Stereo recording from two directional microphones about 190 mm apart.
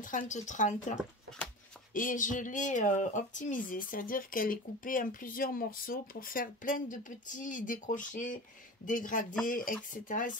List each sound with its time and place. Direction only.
0.0 s speech: 40° left (ahead or behind)
2.0 s speech: 45° left (ahead or behind)